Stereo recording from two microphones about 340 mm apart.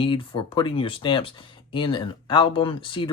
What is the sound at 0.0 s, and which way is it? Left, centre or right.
Speech, centre.